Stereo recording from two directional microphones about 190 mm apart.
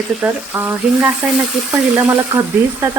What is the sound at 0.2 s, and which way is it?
A woman's voice, 10° right (ahead or behind).